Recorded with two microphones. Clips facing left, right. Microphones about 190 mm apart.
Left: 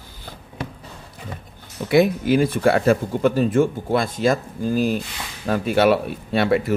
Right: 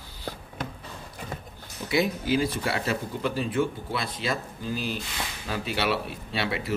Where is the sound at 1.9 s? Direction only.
55° left (ahead or behind).